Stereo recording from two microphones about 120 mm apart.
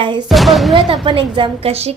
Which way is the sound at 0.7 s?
45° right (ahead or behind).